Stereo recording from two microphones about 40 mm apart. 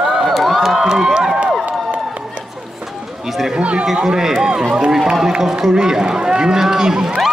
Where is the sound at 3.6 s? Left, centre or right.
Right.